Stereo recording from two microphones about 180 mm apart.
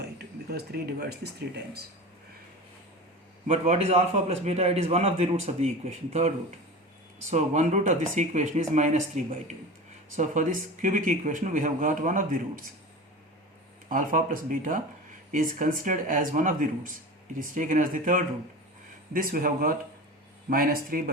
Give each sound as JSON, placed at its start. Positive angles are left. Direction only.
{"t": 0.5, "sound": "speech", "side_deg": -60}
{"t": 3.4, "sound": "a man's voice", "side_deg": -40}
{"t": 13.9, "sound": "a man's voice", "side_deg": -50}